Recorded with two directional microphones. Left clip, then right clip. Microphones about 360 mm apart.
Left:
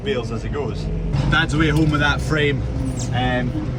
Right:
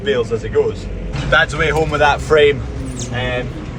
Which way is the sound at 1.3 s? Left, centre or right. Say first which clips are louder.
Right 5 dB; centre.